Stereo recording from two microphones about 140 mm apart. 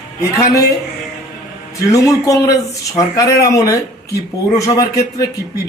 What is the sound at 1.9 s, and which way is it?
A man's voice, 25° left (ahead or behind).